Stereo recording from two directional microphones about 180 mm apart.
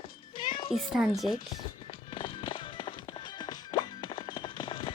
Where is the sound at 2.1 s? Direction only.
30° left (ahead or behind).